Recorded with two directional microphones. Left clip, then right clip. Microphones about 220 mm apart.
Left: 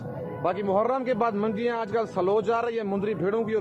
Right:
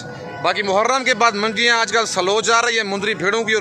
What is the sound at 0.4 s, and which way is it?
A man's voice, 20° right (ahead or behind).